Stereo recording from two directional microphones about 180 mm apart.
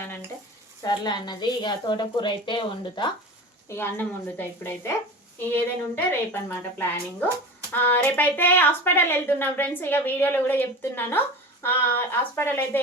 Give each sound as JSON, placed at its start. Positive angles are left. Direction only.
{"t": 0.8, "sound": "a woman's voice", "side_deg": 25}
{"t": 3.7, "sound": "speech", "side_deg": 10}
{"t": 6.1, "sound": "speech", "side_deg": 10}